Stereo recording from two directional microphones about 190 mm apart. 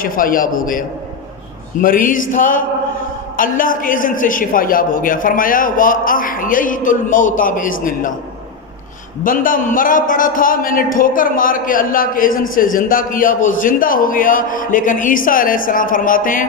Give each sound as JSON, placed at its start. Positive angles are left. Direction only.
{"t": 0.0, "sound": "a man's voice", "side_deg": 45}
{"t": 9.2, "sound": "a man's voice", "side_deg": 45}